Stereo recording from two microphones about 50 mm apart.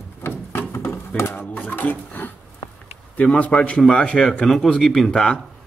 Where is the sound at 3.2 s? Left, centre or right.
Left.